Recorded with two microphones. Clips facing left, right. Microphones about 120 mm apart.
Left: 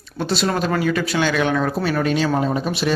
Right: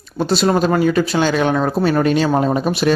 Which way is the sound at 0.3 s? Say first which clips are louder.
Right 5 dB; 40° right (ahead or behind).